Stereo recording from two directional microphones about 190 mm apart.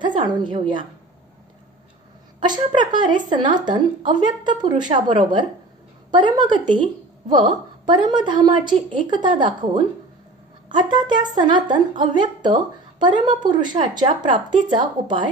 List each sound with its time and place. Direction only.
0.2 s a woman's voice: 25° right (ahead or behind)
2.4 s a woman's voice: 25° right (ahead or behind)